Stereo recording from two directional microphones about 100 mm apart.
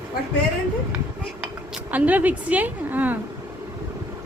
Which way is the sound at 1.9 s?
15° right (ahead or behind).